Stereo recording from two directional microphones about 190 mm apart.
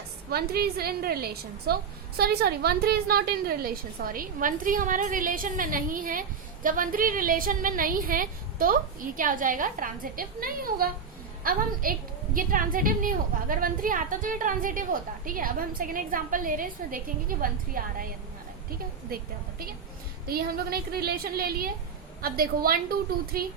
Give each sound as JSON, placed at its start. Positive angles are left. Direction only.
{"t": 0.3, "sound": "a woman's voice", "side_deg": -55}
{"t": 19.1, "sound": "a woman's voice", "side_deg": -50}